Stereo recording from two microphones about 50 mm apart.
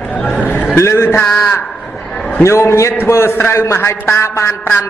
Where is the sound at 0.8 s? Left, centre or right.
Left.